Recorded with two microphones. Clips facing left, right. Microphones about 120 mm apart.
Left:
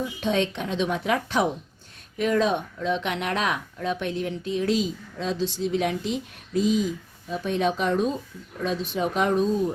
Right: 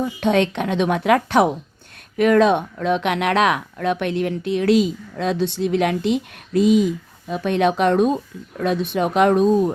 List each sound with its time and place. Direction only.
0.0 s a woman's voice: 60° right (ahead or behind)